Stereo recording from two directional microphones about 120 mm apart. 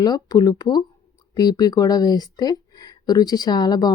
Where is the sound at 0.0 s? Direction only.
35° left (ahead or behind).